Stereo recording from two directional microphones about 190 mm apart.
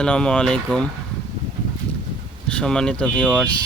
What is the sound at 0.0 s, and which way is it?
Speech, 5° left (ahead or behind).